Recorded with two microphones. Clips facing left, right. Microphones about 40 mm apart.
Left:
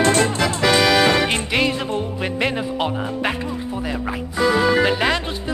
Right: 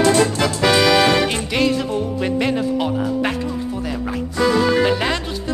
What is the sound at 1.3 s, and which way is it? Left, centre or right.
Music, left.